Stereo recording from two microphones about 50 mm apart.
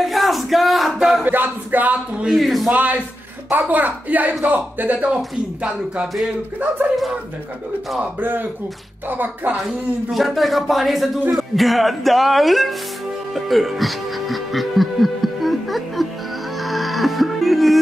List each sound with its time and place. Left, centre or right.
0.0 s a sound: centre
1.2 s speech: right
2.3 s speech: centre
2.7 s speech: right
8.2 s speech: right
9.6 s speech: centre
13.3 s music: centre